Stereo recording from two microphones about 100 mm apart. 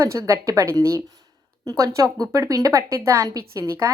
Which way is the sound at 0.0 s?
30° right (ahead or behind).